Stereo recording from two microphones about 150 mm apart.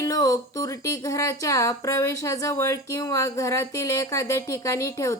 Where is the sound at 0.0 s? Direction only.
20° left (ahead or behind).